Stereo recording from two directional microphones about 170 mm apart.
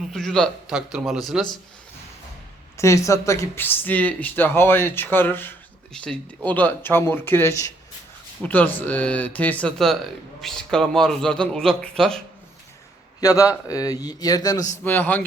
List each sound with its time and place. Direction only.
0.1 s a man's voice: centre (ahead or behind)
2.7 s a man's voice: 15° left (ahead or behind)
13.2 s speech: 20° left (ahead or behind)